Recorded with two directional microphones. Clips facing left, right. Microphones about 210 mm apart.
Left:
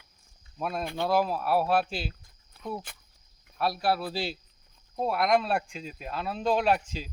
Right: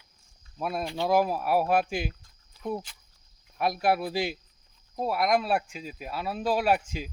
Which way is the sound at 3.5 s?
15° right (ahead or behind).